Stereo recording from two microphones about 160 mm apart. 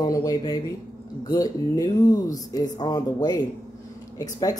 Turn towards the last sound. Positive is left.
turn(degrees=20)  # may be behind; listen again after turning